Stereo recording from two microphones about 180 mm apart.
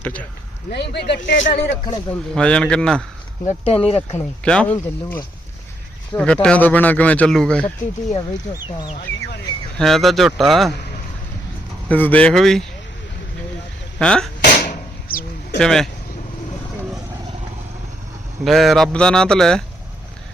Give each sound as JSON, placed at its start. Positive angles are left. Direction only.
{"t": 0.0, "sound": "speech", "side_deg": 10}
{"t": 0.7, "sound": "speech", "side_deg": 70}
{"t": 1.5, "sound": "speech", "side_deg": 55}
{"t": 2.3, "sound": "speech", "side_deg": 5}
{"t": 3.4, "sound": "speech", "side_deg": 35}
{"t": 4.4, "sound": "speech", "side_deg": 5}
{"t": 9.7, "sound": "speech", "side_deg": 0}
{"t": 11.9, "sound": "speech", "side_deg": 10}
{"t": 14.0, "sound": "speech", "side_deg": 5}
{"t": 14.4, "sound": "a sound", "side_deg": 50}
{"t": 15.5, "sound": "speech", "side_deg": 5}
{"t": 18.4, "sound": "speech", "side_deg": 0}